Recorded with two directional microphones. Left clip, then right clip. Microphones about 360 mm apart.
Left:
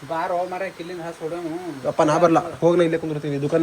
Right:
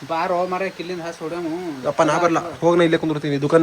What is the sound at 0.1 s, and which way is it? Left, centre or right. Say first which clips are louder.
Speech: right 3 dB; right.